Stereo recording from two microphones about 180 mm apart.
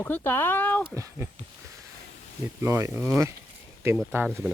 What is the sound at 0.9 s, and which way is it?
Speech, 15° right (ahead or behind).